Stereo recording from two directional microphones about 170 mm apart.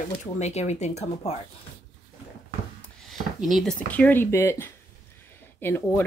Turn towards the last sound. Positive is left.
turn(degrees=15)  # may be behind; listen again after turning